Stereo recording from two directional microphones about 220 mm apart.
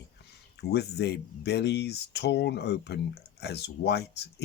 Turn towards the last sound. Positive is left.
turn(degrees=50)  # may be behind; listen again after turning